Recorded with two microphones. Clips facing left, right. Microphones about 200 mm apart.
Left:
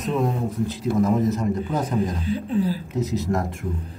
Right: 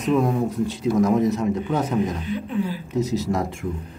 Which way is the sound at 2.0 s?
35° left (ahead or behind).